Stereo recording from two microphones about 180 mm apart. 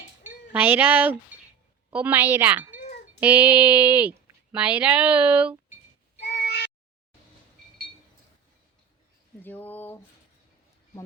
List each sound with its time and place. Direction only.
0.2 s a woman's voice: 10° right (ahead or behind)
6.2 s meow: 65° left (ahead or behind)
9.4 s a sound: 10° left (ahead or behind)